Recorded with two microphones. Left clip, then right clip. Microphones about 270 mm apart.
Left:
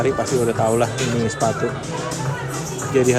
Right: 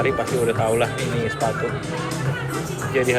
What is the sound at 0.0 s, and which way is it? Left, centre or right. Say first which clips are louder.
Speech: left 1 dB; centre.